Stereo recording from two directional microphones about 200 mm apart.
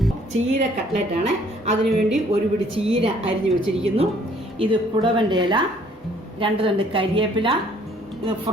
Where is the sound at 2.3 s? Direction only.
30° right (ahead or behind).